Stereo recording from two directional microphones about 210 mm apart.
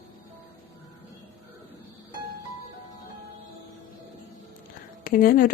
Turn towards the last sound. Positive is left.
turn(degrees=45)  # may be behind; listen again after turning